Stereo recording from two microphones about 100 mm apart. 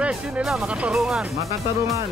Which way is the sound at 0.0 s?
10° right (ahead or behind).